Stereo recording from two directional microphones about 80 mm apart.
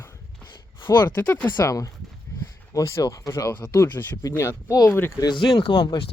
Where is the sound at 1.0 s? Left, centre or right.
Left.